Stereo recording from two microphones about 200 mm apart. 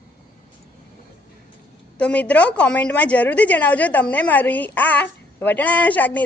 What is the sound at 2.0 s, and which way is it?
A woman's voice, 5° left (ahead or behind).